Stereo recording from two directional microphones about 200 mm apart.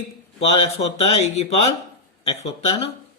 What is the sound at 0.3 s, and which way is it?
Speech, 30° left (ahead or behind).